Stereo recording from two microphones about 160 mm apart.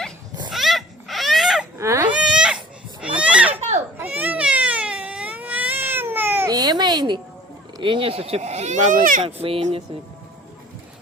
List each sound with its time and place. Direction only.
0.5 s a sound: centre (ahead or behind)
1.8 s baby cry: 15° right (ahead or behind)
3.2 s children playing: 5° right (ahead or behind)
4.0 s cat: 10° right (ahead or behind)
6.5 s baby cry: 25° right (ahead or behind)
7.8 s speech: 30° right (ahead or behind); by 9.2 s 55° right (ahead or behind)
9.2 s speech: 35° right (ahead or behind)